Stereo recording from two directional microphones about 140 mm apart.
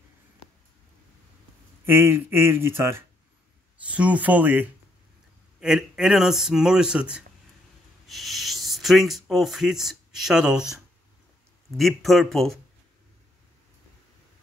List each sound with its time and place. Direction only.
1.9 s a man's voice: 15° right (ahead or behind); by 12.5 s centre (ahead or behind)